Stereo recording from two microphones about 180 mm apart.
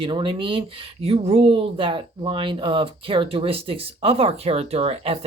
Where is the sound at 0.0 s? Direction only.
25° right (ahead or behind).